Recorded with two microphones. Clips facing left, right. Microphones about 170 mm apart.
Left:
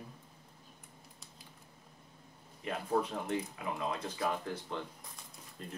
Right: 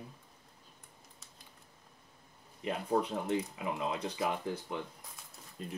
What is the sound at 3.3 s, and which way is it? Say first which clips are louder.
Speech: right 3 dB; 15° right (ahead or behind).